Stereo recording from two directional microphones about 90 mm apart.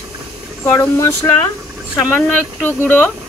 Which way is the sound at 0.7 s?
35° left (ahead or behind).